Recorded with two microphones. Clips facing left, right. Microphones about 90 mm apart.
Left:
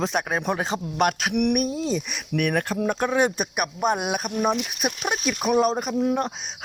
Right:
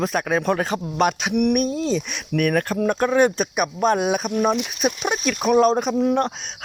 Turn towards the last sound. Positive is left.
turn(degrees=10)  # may be behind; listen again after turning